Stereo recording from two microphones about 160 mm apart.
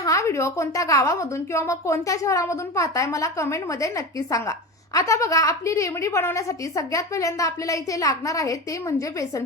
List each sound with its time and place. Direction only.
0.0 s a woman's voice: 20° left (ahead or behind)